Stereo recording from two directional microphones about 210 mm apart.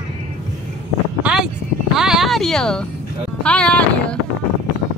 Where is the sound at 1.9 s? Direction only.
Centre (ahead or behind).